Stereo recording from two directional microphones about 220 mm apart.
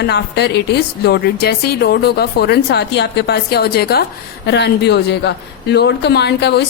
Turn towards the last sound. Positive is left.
turn(degrees=50)  # may be behind; listen again after turning